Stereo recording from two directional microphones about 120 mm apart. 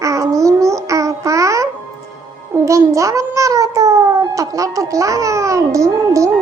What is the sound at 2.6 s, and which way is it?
Cat, 25° right (ahead or behind).